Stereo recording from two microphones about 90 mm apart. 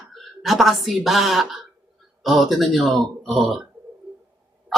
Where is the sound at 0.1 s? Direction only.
Centre (ahead or behind).